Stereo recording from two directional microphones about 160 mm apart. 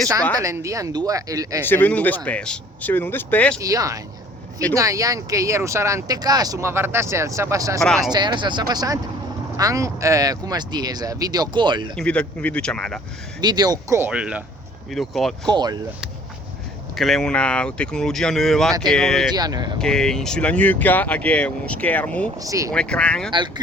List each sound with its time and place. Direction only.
0.3 s speech: 20° right (ahead or behind)
1.6 s speech: 10° left (ahead or behind)
3.6 s speech: 20° right (ahead or behind)
7.8 s speech: 5° left (ahead or behind)
8.1 s speech: 25° right (ahead or behind)
11.9 s speech: 5° left (ahead or behind)
13.4 s speech: 25° right (ahead or behind)
14.1 s speech: 5° right (ahead or behind)
15.4 s speech: 25° right (ahead or behind)
16.9 s speech: centre (ahead or behind)
19.3 s speech: 25° right (ahead or behind)
19.8 s speech: 5° left (ahead or behind)
22.4 s speech: 20° right (ahead or behind)
22.7 s speech: 5° left (ahead or behind)